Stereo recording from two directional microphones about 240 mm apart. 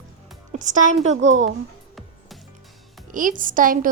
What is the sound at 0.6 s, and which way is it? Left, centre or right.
Speech, right.